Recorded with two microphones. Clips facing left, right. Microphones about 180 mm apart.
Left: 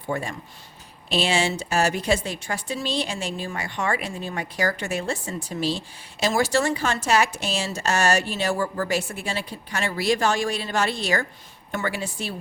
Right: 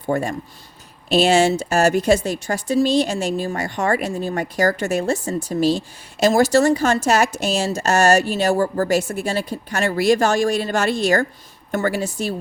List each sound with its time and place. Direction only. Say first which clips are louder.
0.1 s speech: right 7 dB; 45° right (ahead or behind)